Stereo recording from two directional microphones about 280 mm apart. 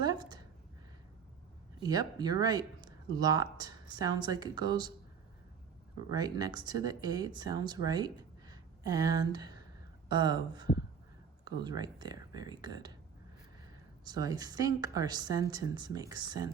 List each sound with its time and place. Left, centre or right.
0.0 s a sound: centre
1.8 s a woman's voice: centre
6.1 s a woman's voice: centre
7.9 s a sound: centre
10.1 s a woman's voice: centre
11.8 s a woman's voice: centre
14.0 s a woman's voice: centre